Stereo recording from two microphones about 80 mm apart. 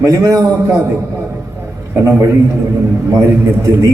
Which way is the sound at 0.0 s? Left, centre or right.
Right.